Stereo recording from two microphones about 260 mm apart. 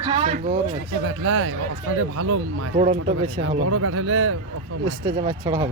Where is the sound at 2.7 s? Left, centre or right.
Right.